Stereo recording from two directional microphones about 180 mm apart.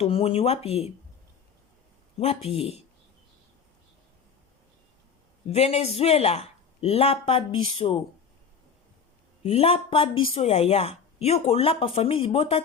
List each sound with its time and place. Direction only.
0.0 s speech: 30° left (ahead or behind)
2.1 s speech: 35° left (ahead or behind)
5.5 s speech: 35° left (ahead or behind)
9.4 s speech: 35° left (ahead or behind)